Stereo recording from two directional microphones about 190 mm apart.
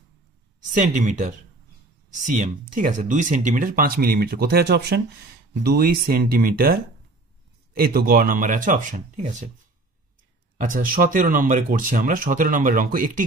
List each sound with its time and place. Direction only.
0.7 s speech: 40° right (ahead or behind)
10.6 s speech: 45° right (ahead or behind)